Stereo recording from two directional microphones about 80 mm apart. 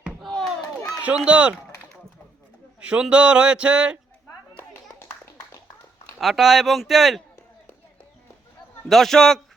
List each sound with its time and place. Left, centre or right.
0.2 s crowd: centre
1.0 s speech: centre
2.8 s speech: centre
4.7 s clapping: left
6.1 s speech: centre
8.9 s speech: centre